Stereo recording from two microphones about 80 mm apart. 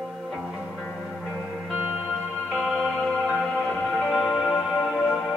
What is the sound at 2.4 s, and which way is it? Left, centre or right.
Music, centre.